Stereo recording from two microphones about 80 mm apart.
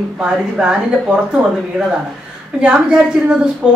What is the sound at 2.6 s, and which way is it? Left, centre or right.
A woman's voice, centre.